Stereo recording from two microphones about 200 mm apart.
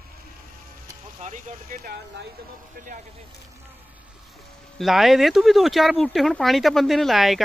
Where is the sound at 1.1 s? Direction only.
40° right (ahead or behind).